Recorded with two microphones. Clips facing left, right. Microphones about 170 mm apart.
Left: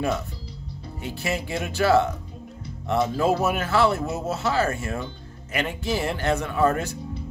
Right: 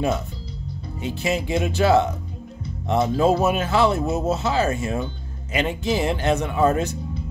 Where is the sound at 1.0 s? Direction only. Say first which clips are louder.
Right 4 dB; 20° right (ahead or behind).